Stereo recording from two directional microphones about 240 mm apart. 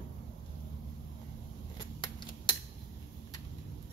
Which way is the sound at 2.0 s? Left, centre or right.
Centre.